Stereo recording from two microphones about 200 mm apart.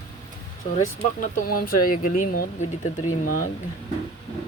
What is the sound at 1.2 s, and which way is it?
Speech, 45° left (ahead or behind).